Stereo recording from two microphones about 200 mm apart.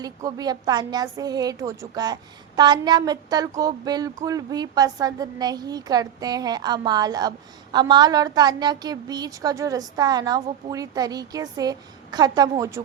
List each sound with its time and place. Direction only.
0.0 s a woman's voice: 20° right (ahead or behind)